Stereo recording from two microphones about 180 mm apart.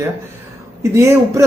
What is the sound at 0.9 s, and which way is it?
Speech, 15° right (ahead or behind).